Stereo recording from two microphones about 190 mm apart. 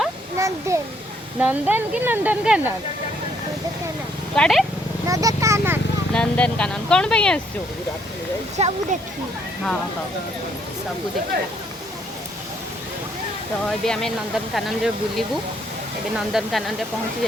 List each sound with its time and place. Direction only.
0.3 s a sound: 15° right (ahead or behind)
1.4 s speech: 10° right (ahead or behind)
4.4 s speech: centre (ahead or behind)
5.0 s speech: 15° right (ahead or behind)
6.1 s speech: 5° left (ahead or behind)
8.5 s speech: 35° right (ahead or behind)
13.7 s speech: 5° left (ahead or behind)